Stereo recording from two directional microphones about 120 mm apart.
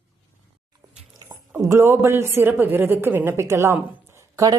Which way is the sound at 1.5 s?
20° right (ahead or behind).